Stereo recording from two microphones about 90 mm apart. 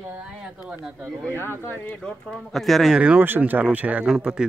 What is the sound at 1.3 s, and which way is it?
Speech, 25° left (ahead or behind).